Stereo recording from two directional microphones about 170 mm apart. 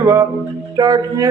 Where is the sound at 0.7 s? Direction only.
20° right (ahead or behind).